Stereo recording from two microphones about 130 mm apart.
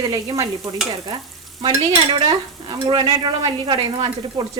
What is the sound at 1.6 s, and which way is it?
Speech, 40° right (ahead or behind).